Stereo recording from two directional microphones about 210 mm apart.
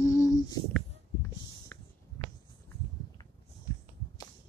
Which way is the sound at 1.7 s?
10° left (ahead or behind).